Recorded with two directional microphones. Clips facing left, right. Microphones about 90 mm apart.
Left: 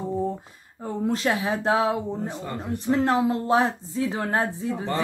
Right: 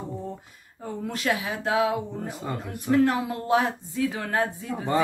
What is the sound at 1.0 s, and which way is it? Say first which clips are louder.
Speech: left 4 dB; 30° left (ahead or behind).